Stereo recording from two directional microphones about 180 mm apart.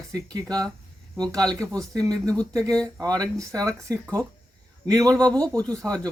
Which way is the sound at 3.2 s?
15° right (ahead or behind).